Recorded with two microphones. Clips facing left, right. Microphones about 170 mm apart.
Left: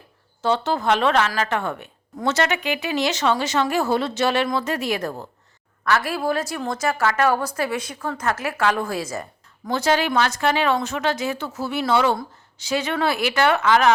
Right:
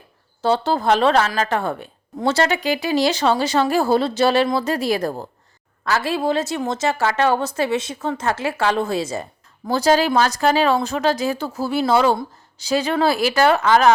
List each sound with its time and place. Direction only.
0.4 s a woman's voice: 35° right (ahead or behind)